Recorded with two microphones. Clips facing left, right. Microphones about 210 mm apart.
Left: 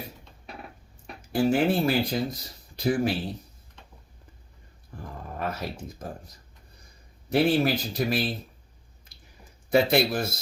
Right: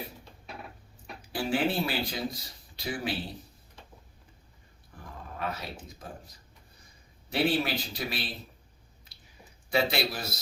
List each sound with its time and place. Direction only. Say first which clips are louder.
1.3 s speech: left 6 dB; 45° left (ahead or behind)
5.4 s speech: left 4 dB; 50° left (ahead or behind)
7.3 s speech: left 6 dB; 45° left (ahead or behind)
9.7 s speech: left 7 dB; 50° left (ahead or behind)